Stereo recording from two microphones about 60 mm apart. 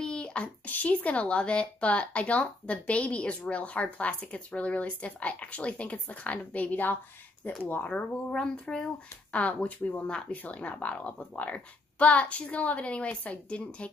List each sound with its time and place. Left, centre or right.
0.0 s speech: centre